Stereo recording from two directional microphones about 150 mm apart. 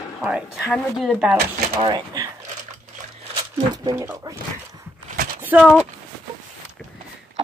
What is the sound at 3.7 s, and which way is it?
Speech, 25° right (ahead or behind).